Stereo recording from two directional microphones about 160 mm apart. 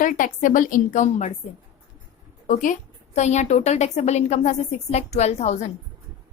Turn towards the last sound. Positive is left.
turn(degrees=45)  # may be behind; listen again after turning